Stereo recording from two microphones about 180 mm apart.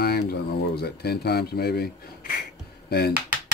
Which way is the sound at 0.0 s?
60° left (ahead or behind).